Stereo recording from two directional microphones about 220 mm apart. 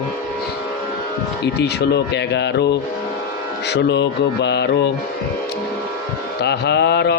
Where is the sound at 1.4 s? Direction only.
50° left (ahead or behind).